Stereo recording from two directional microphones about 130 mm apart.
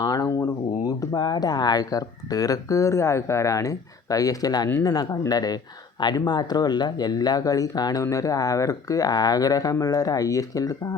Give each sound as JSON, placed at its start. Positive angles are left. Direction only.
{"t": 0.0, "sound": "speech", "side_deg": 30}